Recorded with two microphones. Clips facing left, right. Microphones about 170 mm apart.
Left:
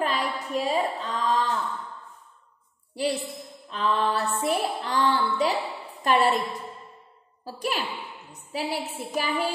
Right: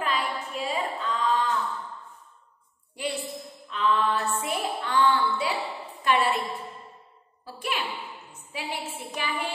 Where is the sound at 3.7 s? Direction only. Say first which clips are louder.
Even; 35° left (ahead or behind).